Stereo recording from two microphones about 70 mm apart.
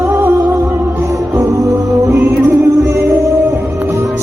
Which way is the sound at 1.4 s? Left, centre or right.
Right.